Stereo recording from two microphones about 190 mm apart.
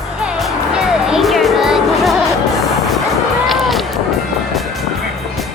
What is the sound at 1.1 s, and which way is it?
Music, centre (ahead or behind).